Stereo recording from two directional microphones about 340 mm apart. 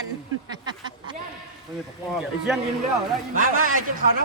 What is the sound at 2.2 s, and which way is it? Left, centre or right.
Speech, centre.